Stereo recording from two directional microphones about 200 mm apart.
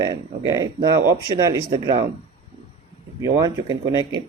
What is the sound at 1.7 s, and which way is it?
Speech, 25° right (ahead or behind).